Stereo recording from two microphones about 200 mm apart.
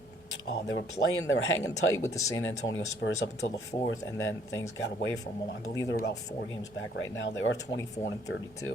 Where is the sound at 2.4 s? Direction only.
75° left (ahead or behind).